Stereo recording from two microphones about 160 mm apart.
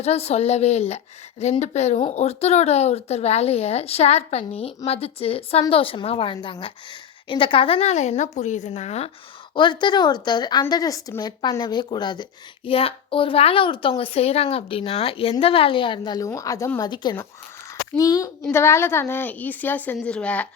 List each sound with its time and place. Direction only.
0.0 s a woman's voice: 40° left (ahead or behind)
9.6 s a woman's voice: 30° left (ahead or behind); by 20.5 s 10° left (ahead or behind)